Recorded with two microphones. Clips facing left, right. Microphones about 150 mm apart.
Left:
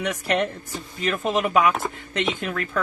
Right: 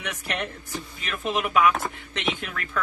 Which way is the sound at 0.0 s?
40° left (ahead or behind).